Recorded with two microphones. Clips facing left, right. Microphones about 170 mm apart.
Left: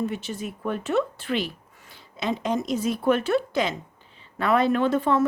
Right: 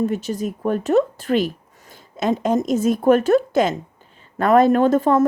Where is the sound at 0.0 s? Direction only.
40° right (ahead or behind).